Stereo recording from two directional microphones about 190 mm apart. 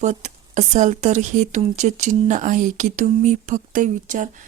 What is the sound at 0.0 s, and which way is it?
Speech, 40° right (ahead or behind).